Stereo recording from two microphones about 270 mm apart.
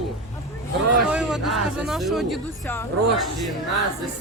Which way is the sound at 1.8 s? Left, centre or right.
Centre.